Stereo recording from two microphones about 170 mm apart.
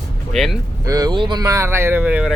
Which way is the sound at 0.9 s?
20° right (ahead or behind).